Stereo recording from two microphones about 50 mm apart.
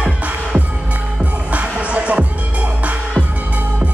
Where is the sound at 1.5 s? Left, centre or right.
Right.